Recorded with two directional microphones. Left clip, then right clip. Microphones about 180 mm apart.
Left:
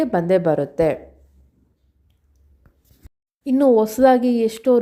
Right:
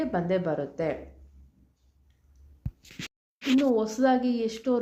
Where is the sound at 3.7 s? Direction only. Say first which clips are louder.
Left 13 dB; 40° left (ahead or behind).